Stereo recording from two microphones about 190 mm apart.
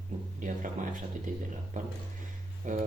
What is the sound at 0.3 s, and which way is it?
A man's voice, 45° right (ahead or behind).